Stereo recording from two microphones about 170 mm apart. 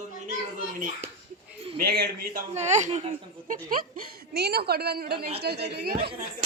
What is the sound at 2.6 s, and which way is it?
Speech, 40° right (ahead or behind).